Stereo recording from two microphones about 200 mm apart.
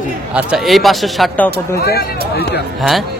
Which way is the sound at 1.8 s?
55° left (ahead or behind).